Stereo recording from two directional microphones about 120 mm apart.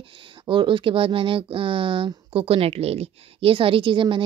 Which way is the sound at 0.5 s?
45° right (ahead or behind).